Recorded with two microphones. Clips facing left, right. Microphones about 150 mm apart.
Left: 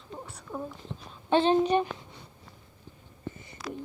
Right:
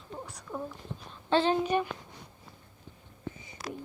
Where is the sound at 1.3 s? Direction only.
20° left (ahead or behind).